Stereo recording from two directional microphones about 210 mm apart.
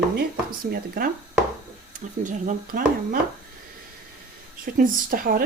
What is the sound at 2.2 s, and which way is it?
Speech, 35° right (ahead or behind).